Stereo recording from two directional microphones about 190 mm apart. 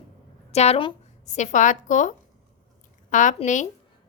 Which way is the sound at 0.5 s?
35° left (ahead or behind).